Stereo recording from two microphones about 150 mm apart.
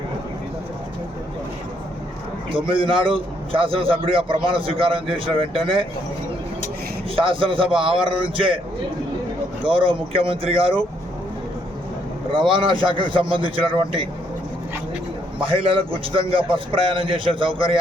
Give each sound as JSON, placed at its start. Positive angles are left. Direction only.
{"t": 2.5, "sound": "a man's voice", "side_deg": -35}
{"t": 7.2, "sound": "a man's voice", "side_deg": -35}
{"t": 9.6, "sound": "a man's voice", "side_deg": -35}
{"t": 12.3, "sound": "a man's voice", "side_deg": -35}
{"t": 15.4, "sound": "a man's voice", "side_deg": -35}